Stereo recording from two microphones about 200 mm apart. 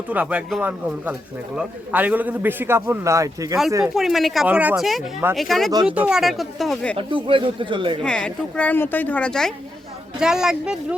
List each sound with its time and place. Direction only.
0.1 s a man's voice: 5° right (ahead or behind)
3.9 s speech: centre (ahead or behind)
6.9 s speech: 25° right (ahead or behind)
8.0 s a woman's voice: 5° left (ahead or behind)